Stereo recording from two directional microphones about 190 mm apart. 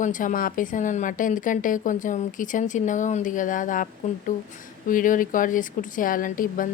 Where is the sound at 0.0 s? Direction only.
45° left (ahead or behind).